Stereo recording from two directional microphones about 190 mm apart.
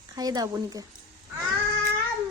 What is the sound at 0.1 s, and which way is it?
Speech, 20° right (ahead or behind).